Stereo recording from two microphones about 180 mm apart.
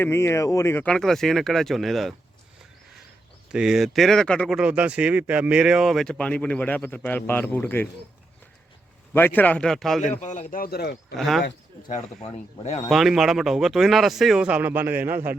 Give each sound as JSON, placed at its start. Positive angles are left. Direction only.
{"t": 0.0, "sound": "speech", "side_deg": 15}
{"t": 3.5, "sound": "speech", "side_deg": -5}
{"t": 9.1, "sound": "speech", "side_deg": 10}
{"t": 10.2, "sound": "a man's voice", "side_deg": 40}
{"t": 11.2, "sound": "speech", "side_deg": 0}
{"t": 12.2, "sound": "speech", "side_deg": 35}
{"t": 12.9, "sound": "speech", "side_deg": 0}